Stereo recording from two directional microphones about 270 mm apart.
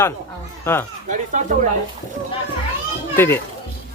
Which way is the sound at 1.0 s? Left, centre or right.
Right.